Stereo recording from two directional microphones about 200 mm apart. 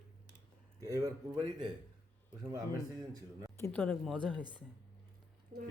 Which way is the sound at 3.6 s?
10° left (ahead or behind).